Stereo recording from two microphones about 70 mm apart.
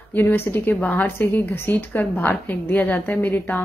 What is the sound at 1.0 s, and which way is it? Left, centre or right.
A woman's voice, left.